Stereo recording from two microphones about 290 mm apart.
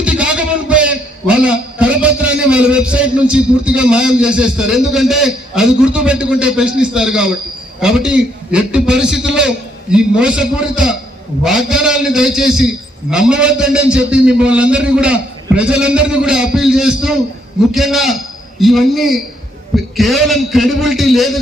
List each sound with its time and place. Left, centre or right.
0.0 s a man's voice: centre